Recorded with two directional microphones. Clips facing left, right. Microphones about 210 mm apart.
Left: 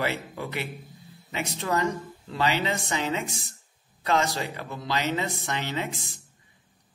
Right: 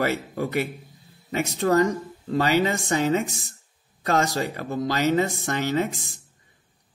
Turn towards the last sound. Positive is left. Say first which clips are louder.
# right 7 dB
turn(degrees=-45)  # may be behind; listen again after turning